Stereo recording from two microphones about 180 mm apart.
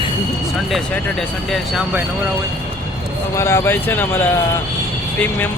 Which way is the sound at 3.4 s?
15° left (ahead or behind).